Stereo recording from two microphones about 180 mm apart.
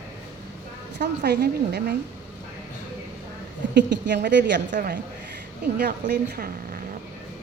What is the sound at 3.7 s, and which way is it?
A woman's voice, 75° right (ahead or behind).